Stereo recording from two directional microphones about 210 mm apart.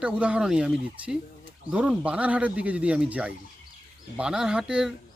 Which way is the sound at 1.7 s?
5° right (ahead or behind).